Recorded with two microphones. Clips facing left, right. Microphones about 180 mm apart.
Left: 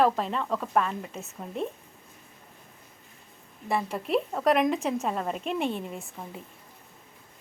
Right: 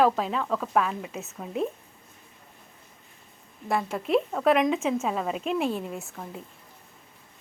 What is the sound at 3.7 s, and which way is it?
A woman's voice, centre (ahead or behind).